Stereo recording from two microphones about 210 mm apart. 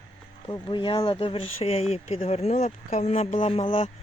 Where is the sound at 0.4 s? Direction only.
20° left (ahead or behind).